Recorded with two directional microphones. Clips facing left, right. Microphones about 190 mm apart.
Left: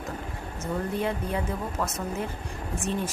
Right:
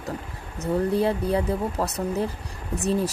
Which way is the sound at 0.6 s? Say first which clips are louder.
Right 7 dB; 35° right (ahead or behind).